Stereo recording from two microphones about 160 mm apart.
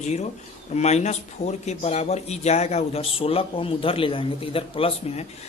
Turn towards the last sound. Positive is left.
turn(degrees=40)  # may be behind; listen again after turning